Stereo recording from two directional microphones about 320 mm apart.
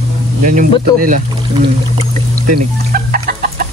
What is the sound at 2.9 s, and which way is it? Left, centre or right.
Chicken, right.